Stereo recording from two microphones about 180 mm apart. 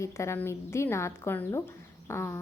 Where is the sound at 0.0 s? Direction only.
15° left (ahead or behind).